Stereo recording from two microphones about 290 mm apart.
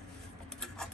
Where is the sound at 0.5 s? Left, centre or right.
Centre.